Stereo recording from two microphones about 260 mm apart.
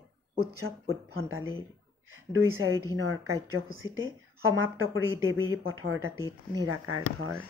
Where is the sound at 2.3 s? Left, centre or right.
Right.